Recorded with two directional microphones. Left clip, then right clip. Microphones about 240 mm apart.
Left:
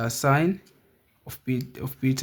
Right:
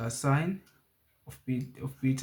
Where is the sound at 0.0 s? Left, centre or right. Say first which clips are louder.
Left 9 dB; left.